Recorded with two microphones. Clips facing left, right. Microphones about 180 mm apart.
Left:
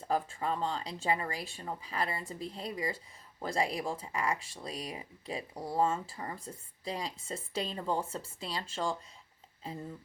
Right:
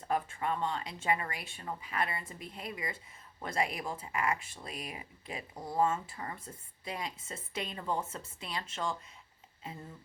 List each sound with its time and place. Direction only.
0.0 s speech: 30° left (ahead or behind)